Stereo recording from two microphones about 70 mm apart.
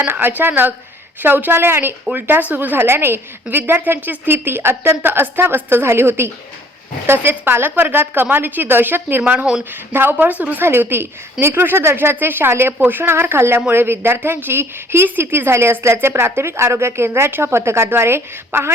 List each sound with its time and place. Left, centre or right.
0.1 s a woman's voice: right